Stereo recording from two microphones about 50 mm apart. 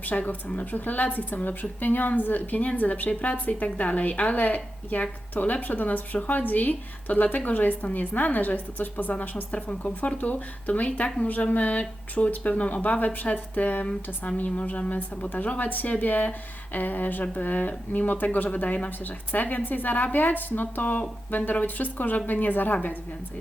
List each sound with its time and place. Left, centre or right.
0.0 s a woman's voice: left